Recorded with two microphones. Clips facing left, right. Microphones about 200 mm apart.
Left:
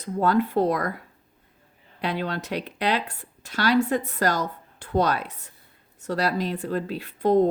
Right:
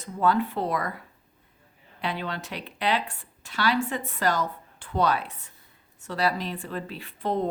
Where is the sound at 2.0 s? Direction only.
40° left (ahead or behind).